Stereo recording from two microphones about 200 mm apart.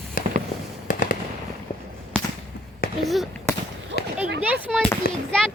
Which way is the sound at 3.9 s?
55° right (ahead or behind).